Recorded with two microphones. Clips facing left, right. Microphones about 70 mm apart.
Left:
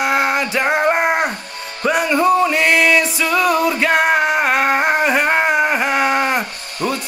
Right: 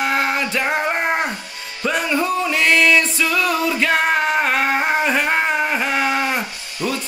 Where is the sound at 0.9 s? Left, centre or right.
Centre.